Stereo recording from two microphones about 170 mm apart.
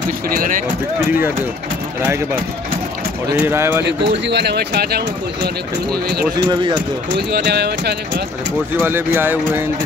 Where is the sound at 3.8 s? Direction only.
90° right; by 6.2 s 65° right (ahead or behind).